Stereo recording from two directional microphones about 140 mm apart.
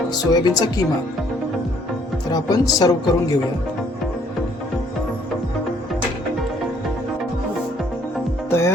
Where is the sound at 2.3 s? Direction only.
25° left (ahead or behind).